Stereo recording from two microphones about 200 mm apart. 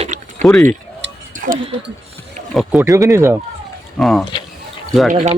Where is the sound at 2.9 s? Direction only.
15° right (ahead or behind).